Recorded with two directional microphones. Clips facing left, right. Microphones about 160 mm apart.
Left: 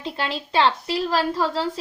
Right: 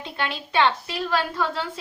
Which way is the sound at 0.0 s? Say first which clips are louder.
Left 2 dB; 30° left (ahead or behind).